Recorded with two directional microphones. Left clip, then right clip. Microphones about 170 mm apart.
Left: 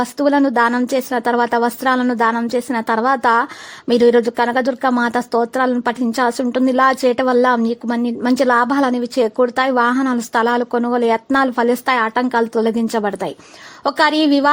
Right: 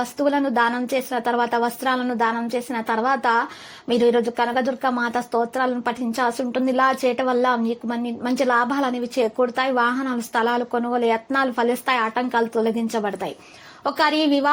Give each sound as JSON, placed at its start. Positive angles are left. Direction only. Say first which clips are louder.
{"t": 0.0, "sound": "a woman's voice", "louder": "left 6 dB", "side_deg": 35}